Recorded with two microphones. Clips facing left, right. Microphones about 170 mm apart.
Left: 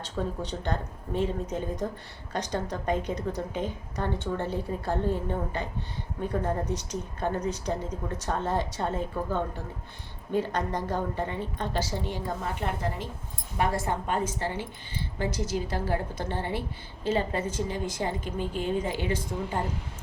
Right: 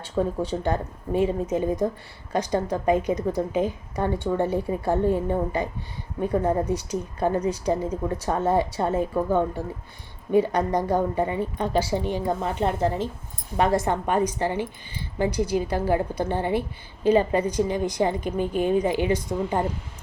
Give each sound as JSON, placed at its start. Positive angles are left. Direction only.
{"t": 0.0, "sound": "a woman's voice", "side_deg": -10}